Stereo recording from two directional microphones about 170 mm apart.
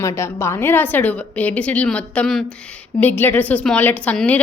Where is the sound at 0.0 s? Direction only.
15° left (ahead or behind).